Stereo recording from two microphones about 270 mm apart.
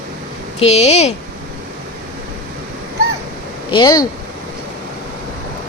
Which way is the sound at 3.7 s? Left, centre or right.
Centre.